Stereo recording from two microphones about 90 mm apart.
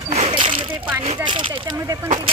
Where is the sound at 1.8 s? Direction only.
35° right (ahead or behind).